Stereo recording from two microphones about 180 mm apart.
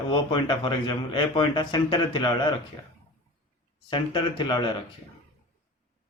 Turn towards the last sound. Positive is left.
turn(degrees=25)  # may be behind; listen again after turning